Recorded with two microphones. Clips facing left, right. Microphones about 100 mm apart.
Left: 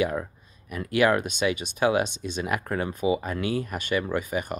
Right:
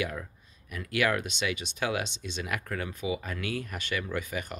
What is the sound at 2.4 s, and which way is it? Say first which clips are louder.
Speech: left 6 dB; 30° left (ahead or behind).